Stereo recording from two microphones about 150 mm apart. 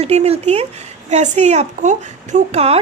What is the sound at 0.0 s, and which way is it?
A woman's voice, 45° right (ahead or behind).